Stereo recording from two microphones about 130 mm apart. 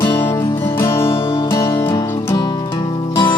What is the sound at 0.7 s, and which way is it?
Music, 20° left (ahead or behind).